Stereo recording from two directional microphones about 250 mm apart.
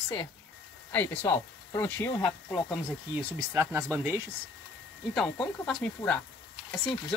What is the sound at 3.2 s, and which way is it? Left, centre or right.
Speech, centre.